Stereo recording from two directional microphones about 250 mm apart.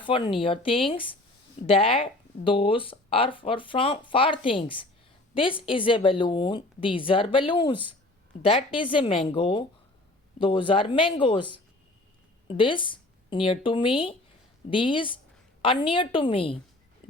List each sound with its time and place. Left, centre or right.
0.0 s speech: centre